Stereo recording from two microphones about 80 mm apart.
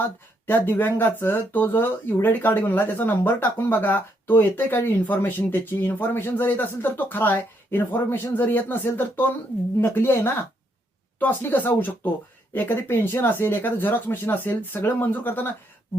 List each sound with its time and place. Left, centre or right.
0.4 s speech: left